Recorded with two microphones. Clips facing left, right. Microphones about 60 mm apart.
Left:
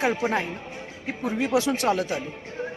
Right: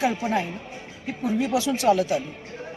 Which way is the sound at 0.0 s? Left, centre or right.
Left.